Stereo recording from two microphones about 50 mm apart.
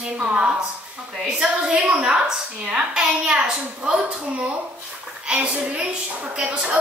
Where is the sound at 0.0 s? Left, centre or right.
Right.